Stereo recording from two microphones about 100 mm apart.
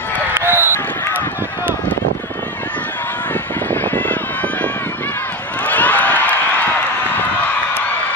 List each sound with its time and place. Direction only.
0.3 s a sound: 25° right (ahead or behind)
3.7 s run: 20° left (ahead or behind)
5.7 s crowd: 15° left (ahead or behind)